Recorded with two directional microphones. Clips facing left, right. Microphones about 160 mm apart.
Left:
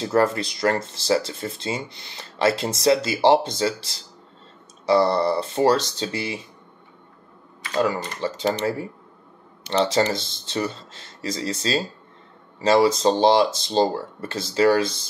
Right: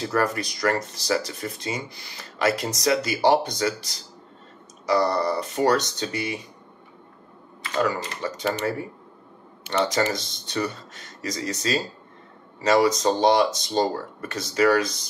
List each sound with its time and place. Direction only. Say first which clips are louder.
0.0 s speech: left 4 dB; 25° left (ahead or behind)
7.8 s speech: left 2 dB; 25° left (ahead or behind)